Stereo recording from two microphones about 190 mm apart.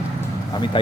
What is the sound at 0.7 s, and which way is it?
Speech, 25° left (ahead or behind).